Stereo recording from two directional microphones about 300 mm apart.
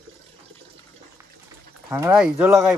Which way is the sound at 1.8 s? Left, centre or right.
Centre.